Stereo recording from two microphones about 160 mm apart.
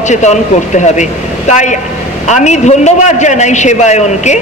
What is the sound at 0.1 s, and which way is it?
A man's voice, 50° left (ahead or behind).